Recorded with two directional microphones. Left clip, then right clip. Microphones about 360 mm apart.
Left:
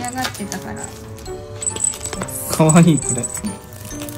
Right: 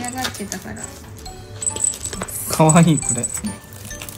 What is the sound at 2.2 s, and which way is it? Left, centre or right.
Speech, centre.